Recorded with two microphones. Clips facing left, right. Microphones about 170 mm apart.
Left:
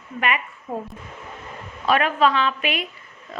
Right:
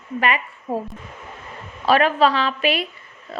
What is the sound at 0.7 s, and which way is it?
Speech, 30° right (ahead or behind).